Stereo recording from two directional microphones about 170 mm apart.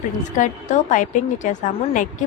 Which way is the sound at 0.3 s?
45° left (ahead or behind).